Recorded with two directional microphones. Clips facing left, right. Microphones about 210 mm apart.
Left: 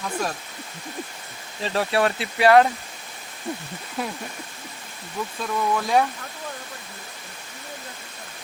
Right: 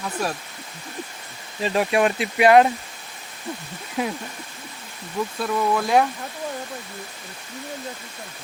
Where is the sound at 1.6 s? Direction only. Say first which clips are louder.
Right 2 dB; 15° right (ahead or behind).